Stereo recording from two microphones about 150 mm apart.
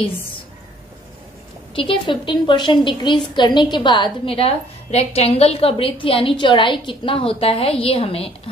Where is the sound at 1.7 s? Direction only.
35° left (ahead or behind).